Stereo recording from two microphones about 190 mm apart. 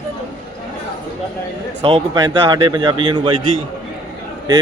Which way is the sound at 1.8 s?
25° right (ahead or behind).